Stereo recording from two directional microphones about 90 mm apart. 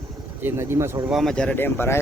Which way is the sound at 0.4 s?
30° right (ahead or behind).